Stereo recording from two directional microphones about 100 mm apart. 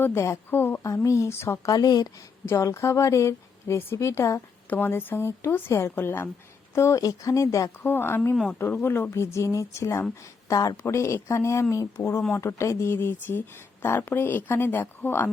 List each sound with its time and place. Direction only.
0.0 s a woman's voice: 25° left (ahead or behind); by 2.0 s 40° left (ahead or behind)
2.5 s a woman's voice: 30° left (ahead or behind)